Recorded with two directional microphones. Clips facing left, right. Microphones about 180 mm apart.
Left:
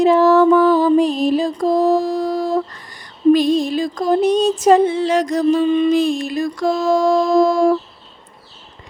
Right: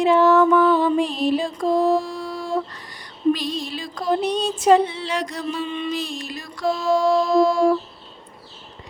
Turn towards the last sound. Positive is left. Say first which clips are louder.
# left 3 dB
turn(degrees=45)  # may be behind; listen again after turning